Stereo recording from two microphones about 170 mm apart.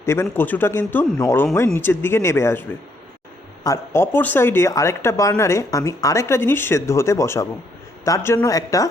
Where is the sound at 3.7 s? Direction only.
15° left (ahead or behind).